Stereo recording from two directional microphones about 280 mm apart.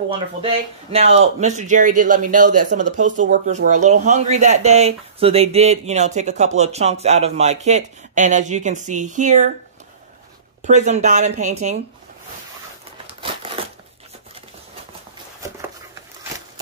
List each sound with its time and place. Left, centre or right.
0.9 s speech: right
10.6 s speech: right
13.0 s crumpling: centre